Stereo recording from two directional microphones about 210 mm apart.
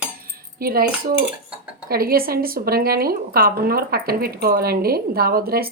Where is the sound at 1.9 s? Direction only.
45° right (ahead or behind).